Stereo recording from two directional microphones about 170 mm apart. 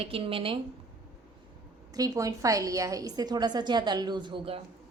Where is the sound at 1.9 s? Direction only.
20° right (ahead or behind).